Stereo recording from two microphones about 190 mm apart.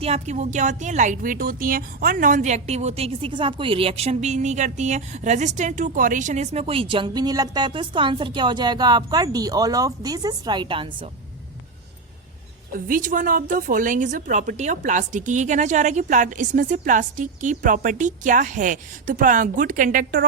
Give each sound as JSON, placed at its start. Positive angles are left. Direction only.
{"t": 0.0, "sound": "speech", "side_deg": -35}
{"t": 12.7, "sound": "a woman's voice", "side_deg": -45}